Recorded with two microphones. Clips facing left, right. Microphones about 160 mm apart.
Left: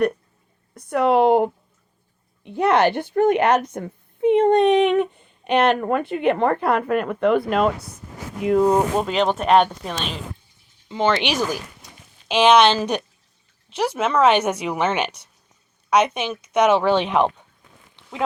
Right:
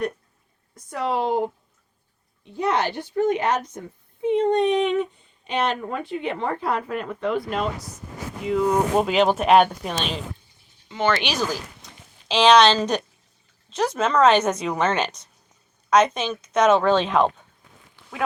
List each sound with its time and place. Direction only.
0.7 s a sound: 60° left (ahead or behind)
2.4 s a woman's voice: 60° left (ahead or behind)
8.4 s speech: 45° left (ahead or behind)
9.0 s speech: 5° right (ahead or behind)
10.8 s speech: 25° left (ahead or behind)
13.7 s speech: 10° left (ahead or behind)